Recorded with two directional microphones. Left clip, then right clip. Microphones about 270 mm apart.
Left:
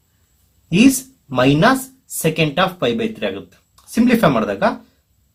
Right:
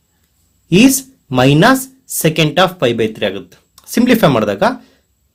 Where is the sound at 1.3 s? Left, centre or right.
Right.